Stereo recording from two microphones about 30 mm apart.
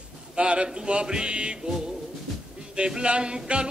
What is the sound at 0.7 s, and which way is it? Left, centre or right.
Music, right.